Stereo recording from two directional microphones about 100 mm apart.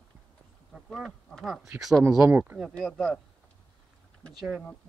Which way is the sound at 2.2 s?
20° right (ahead or behind).